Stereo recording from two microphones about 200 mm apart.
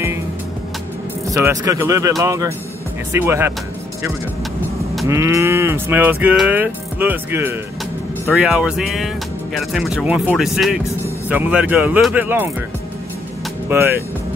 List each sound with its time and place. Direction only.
1.2 s speech: 15° right (ahead or behind)
5.0 s speech: 15° right (ahead or behind)
13.7 s speech: 10° right (ahead or behind)